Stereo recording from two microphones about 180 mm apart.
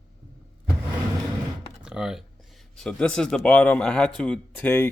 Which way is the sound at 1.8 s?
5° right (ahead or behind).